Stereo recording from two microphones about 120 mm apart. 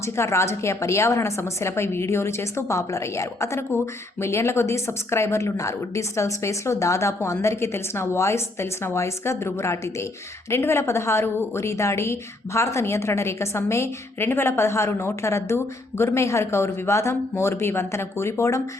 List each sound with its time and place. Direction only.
0.0 s a woman's voice: 25° left (ahead or behind)